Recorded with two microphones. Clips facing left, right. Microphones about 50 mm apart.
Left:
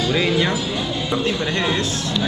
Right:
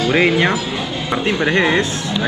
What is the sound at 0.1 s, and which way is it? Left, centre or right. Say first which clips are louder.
Speech: right 6 dB; right.